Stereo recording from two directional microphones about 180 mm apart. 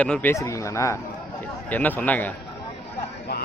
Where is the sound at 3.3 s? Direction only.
65° left (ahead or behind).